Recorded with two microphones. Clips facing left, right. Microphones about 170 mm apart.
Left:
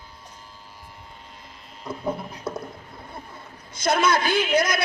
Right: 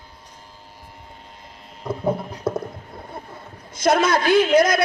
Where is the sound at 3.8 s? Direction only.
45° right (ahead or behind).